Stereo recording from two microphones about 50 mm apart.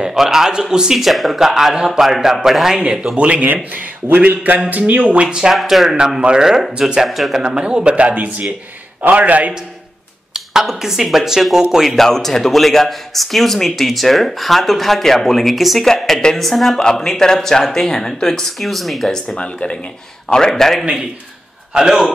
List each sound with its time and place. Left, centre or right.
0.0 s speech: centre
0.9 s speech: centre
2.8 s speech: centre
3.7 s speech: right
5.4 s speech: centre
7.1 s speech: centre
7.4 s speech: centre
7.9 s speech: right
10.3 s speech: centre
12.0 s speech: centre
19.2 s speech: left
21.7 s speech: centre